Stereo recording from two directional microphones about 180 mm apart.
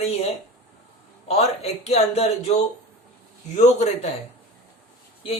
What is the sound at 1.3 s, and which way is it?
Speech, 35° left (ahead or behind).